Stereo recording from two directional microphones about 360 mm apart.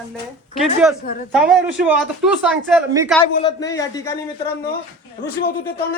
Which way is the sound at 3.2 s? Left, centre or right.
Centre.